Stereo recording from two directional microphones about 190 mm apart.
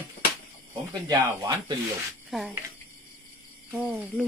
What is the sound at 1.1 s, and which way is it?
Speech, 20° right (ahead or behind).